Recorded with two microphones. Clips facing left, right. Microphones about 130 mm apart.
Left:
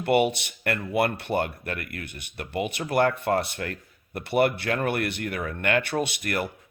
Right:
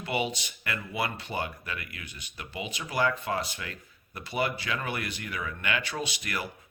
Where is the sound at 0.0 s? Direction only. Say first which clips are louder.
Left 9 dB; 60° left (ahead or behind).